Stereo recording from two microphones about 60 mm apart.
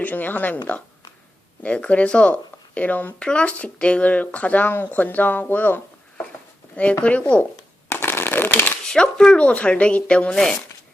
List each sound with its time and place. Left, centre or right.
0.0 s speech: left
3.2 s speech: centre; by 5.8 s left
7.0 s speech: left
7.9 s shuffling cards: left
8.8 s speech: centre